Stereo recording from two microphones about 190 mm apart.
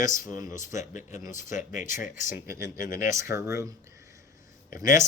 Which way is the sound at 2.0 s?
15° right (ahead or behind).